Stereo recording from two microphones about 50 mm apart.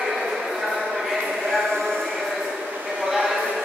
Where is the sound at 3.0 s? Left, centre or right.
Centre.